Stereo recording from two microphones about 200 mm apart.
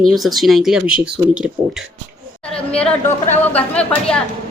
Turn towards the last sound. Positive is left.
turn(degrees=5)  # may be behind; listen again after turning